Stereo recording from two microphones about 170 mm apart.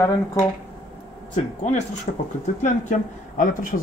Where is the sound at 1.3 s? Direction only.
45° left (ahead or behind).